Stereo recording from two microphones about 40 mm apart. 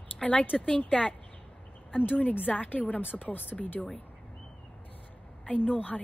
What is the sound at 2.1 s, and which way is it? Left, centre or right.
A woman's voice, left.